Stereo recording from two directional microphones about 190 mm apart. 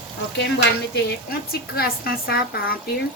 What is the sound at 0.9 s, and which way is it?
Speech, 60° left (ahead or behind).